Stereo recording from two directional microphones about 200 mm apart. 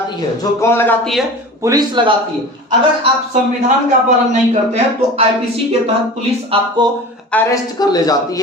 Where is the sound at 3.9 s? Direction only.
35° right (ahead or behind).